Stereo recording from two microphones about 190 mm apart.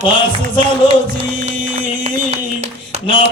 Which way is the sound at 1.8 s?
30° right (ahead or behind).